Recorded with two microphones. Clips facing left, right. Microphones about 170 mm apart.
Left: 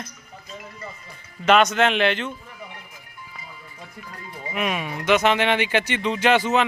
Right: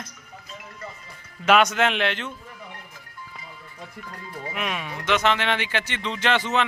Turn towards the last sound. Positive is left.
turn(degrees=10)  # may be behind; listen again after turning